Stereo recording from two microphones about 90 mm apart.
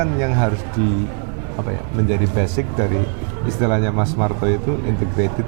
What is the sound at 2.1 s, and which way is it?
A man's voice, 20° right (ahead or behind).